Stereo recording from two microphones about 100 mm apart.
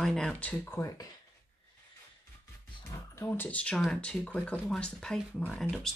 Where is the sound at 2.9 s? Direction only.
35° left (ahead or behind).